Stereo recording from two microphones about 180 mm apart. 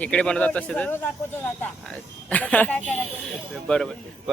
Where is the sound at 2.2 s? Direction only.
10° left (ahead or behind).